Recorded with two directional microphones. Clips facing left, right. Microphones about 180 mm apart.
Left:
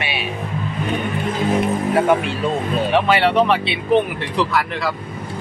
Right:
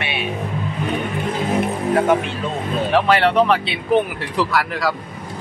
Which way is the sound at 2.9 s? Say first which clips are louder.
Right 1 dB; centre (ahead or behind).